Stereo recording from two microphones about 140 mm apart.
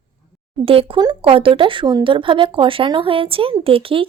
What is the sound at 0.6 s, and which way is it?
A woman's voice, 40° right (ahead or behind).